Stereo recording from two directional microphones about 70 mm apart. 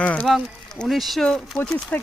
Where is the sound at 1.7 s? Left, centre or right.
Centre.